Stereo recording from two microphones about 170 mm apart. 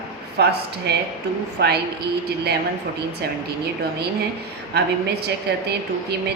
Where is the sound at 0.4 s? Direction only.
75° right (ahead or behind).